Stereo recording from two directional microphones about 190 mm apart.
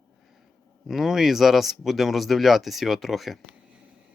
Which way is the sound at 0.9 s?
Centre (ahead or behind).